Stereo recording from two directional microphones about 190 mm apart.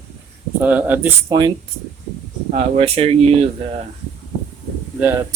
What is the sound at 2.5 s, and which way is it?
Speech, 30° right (ahead or behind).